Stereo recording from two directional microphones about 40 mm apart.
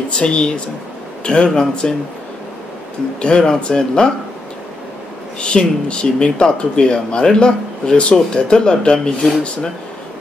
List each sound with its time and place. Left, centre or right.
0.1 s speech: left
3.2 s speech: left
5.4 s speech: left